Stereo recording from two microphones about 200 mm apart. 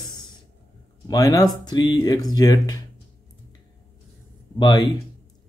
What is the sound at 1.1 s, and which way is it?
Speech, 15° left (ahead or behind).